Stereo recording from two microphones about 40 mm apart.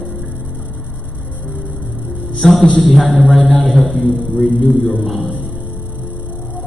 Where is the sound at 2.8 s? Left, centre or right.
Centre.